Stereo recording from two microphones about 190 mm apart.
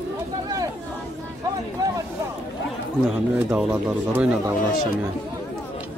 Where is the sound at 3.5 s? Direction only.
10° right (ahead or behind).